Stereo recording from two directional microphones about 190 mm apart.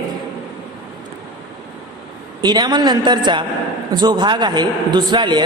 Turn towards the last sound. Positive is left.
turn(degrees=-25)  # may be behind; listen again after turning